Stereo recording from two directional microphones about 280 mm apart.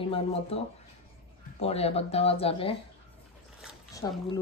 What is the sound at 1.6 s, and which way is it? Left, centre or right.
Speech, left.